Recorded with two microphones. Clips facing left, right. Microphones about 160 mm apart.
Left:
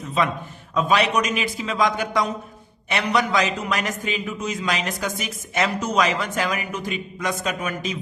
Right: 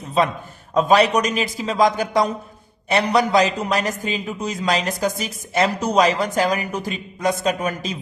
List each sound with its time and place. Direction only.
0.7 s a man's voice: 40° right (ahead or behind)